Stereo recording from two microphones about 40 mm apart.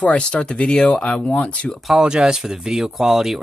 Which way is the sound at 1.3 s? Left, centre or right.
Left.